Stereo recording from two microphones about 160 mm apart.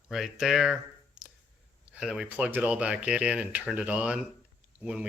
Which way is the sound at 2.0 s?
5° right (ahead or behind).